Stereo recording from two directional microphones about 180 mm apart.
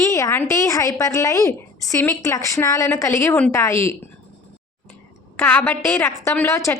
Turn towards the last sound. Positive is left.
turn(degrees=15)  # may be behind; listen again after turning